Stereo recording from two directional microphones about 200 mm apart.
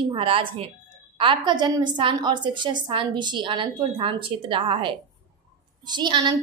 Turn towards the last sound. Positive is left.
turn(degrees=-20)  # may be behind; listen again after turning